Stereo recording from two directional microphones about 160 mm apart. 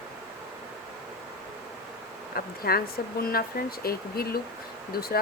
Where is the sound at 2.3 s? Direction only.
70° left (ahead or behind).